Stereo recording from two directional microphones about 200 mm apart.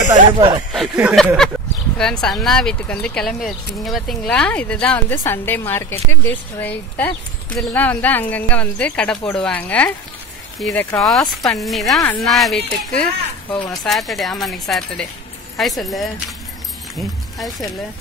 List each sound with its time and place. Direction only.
0.1 s speech: 25° right (ahead or behind)
0.7 s speech: 5° right (ahead or behind)